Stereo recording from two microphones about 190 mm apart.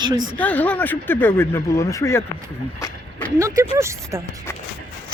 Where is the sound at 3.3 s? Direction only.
15° right (ahead or behind).